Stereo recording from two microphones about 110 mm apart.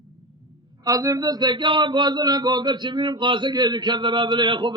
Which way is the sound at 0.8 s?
30° right (ahead or behind).